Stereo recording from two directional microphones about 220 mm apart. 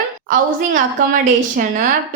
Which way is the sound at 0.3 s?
35° right (ahead or behind).